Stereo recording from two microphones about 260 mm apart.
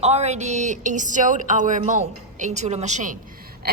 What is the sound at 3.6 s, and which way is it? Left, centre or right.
Gasp, right.